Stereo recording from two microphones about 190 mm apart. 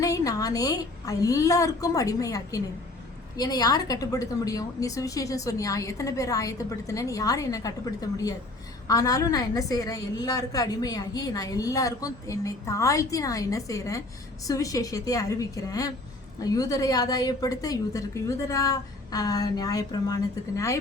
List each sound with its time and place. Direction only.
0.0 s a woman's voice: 20° left (ahead or behind)